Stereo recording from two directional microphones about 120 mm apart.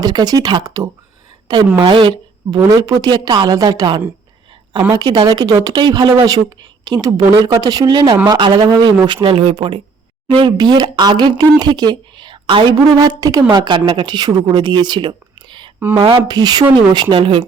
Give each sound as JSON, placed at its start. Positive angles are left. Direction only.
{"t": 0.0, "sound": "speech", "side_deg": -35}
{"t": 1.8, "sound": "speech", "side_deg": -45}
{"t": 2.6, "sound": "speech", "side_deg": -25}
{"t": 9.2, "sound": "speech", "side_deg": -50}